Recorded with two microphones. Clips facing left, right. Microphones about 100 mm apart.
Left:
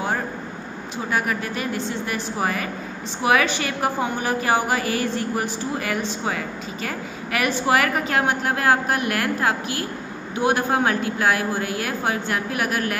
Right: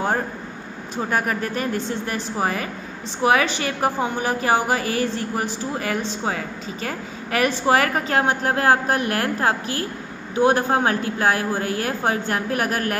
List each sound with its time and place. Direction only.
1.1 s a woman's voice: 40° right (ahead or behind)